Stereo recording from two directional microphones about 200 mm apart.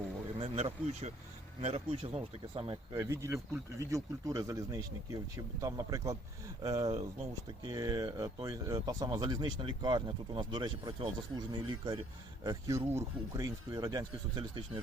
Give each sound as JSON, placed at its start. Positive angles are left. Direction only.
{"t": 0.3, "sound": "speech", "side_deg": -30}
{"t": 2.9, "sound": "speech", "side_deg": -15}